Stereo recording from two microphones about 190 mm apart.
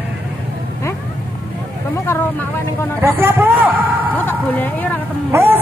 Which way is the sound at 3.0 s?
10° right (ahead or behind).